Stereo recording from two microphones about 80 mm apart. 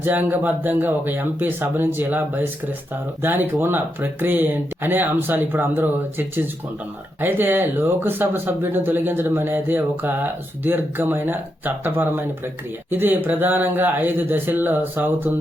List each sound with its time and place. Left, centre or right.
0.0 s speech: right